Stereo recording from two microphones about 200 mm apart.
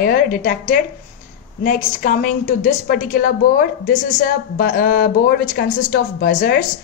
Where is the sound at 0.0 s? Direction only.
45° left (ahead or behind).